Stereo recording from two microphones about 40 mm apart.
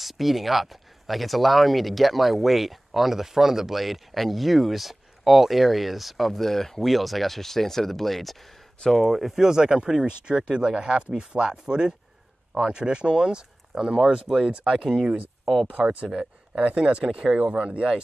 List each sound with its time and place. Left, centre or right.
0.0 s speech: centre
9.4 s speech: centre
17.4 s speech: right